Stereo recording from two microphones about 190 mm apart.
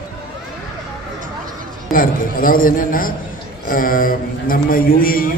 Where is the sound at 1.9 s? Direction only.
45° left (ahead or behind).